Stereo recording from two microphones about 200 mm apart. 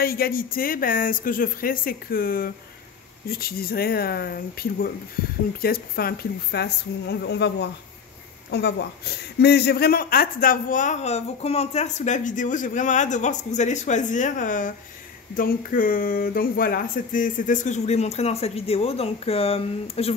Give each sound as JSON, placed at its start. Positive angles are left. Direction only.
{"t": 0.0, "sound": "a woman's voice", "side_deg": 50}